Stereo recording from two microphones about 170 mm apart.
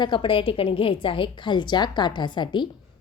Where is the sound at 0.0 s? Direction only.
30° left (ahead or behind).